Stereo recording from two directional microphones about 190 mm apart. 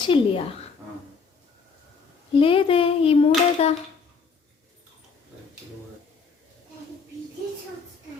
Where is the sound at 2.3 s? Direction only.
30° left (ahead or behind).